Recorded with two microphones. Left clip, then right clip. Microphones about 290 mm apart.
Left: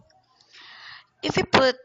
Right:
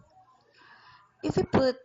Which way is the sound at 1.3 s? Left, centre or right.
Left.